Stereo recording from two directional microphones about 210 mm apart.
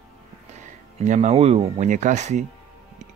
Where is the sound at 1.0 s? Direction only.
35° right (ahead or behind).